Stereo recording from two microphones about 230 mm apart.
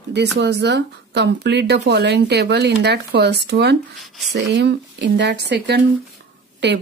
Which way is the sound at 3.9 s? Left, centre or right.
Centre.